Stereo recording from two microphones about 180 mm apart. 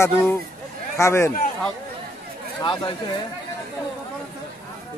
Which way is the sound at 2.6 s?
25° left (ahead or behind).